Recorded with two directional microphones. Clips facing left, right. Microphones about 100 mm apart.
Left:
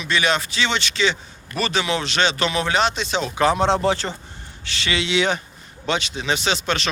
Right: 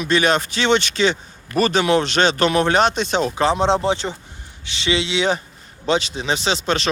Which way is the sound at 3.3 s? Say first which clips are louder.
Left 1 dB; 25° right (ahead or behind).